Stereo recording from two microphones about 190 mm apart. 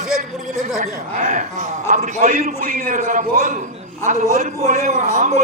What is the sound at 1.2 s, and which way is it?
A man's voice, 40° right (ahead or behind).